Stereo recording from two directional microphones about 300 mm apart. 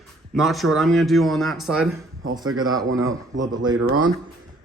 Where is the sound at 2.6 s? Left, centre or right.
Centre.